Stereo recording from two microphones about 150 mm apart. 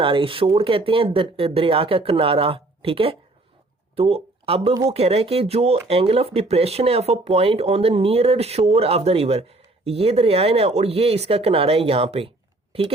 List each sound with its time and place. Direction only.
0.0 s speech: 35° right (ahead or behind)